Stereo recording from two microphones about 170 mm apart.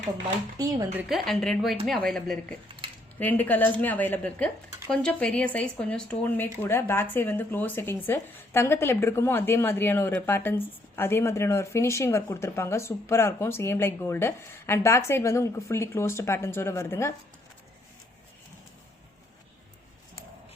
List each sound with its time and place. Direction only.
0.6 s speech: 20° right (ahead or behind)
1.0 s a woman's voice: centre (ahead or behind); by 17.2 s 15° left (ahead or behind)